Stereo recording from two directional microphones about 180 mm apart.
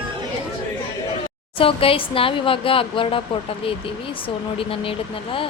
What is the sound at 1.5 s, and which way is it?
Speech, 30° left (ahead or behind).